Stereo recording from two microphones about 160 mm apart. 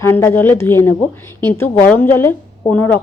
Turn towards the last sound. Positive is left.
turn(degrees=15)  # may be behind; listen again after turning